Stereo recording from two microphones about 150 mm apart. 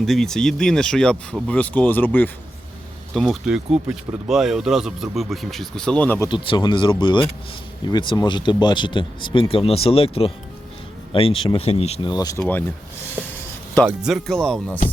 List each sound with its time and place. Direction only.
0.0 s speech: centre (ahead or behind)
3.2 s speech: centre (ahead or behind)
6.1 s speech: 30° left (ahead or behind)
12.1 s speech: 25° left (ahead or behind)
12.4 s speech: 10° left (ahead or behind)
13.8 s speech: 5° right (ahead or behind)